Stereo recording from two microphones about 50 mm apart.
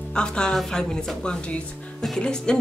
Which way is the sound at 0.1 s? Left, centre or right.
Centre.